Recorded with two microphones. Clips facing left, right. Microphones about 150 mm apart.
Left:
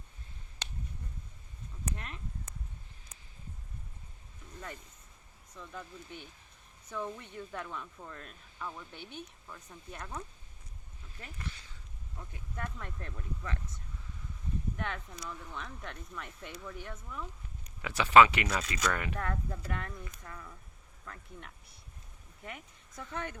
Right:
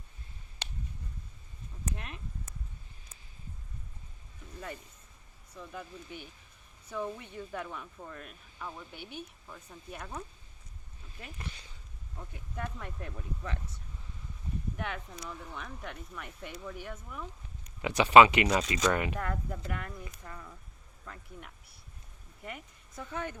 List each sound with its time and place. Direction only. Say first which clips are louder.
2.0 s a sound: even; 15° right (ahead or behind)
5.5 s speech: right 2 dB; 15° right (ahead or behind)
14.8 s speech: right 1 dB; 15° right (ahead or behind)